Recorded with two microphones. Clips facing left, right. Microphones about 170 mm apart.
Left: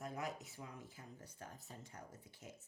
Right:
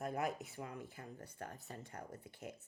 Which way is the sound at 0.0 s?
60° right (ahead or behind).